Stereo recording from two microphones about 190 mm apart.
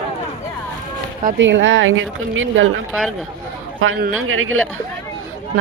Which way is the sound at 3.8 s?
90° right.